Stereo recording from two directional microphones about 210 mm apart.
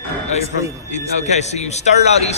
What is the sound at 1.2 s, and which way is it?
A man's voice, 30° left (ahead or behind).